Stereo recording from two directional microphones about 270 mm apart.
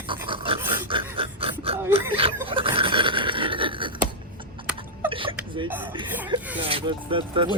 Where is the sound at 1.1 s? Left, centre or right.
Centre.